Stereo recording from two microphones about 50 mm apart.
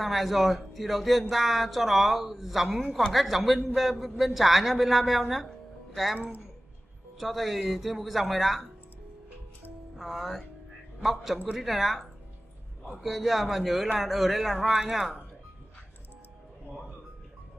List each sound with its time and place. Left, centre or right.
0.0 s a man's voice: centre
7.2 s a man's voice: centre
9.9 s a man's voice: centre